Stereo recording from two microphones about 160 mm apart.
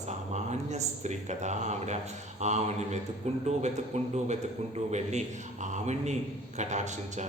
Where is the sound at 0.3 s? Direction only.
45° right (ahead or behind).